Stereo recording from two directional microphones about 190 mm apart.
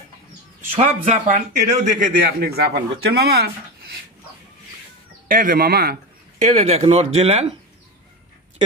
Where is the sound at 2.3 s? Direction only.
55° right (ahead or behind).